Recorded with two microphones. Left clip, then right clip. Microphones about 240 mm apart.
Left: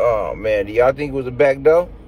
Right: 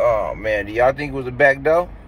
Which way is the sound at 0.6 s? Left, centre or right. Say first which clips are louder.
Left 1 dB; centre.